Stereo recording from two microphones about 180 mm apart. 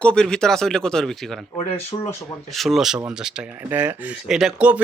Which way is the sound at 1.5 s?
35° left (ahead or behind).